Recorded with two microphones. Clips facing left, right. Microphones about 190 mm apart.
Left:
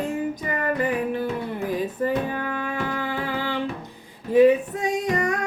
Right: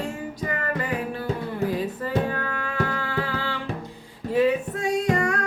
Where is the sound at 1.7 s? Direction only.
15° left (ahead or behind).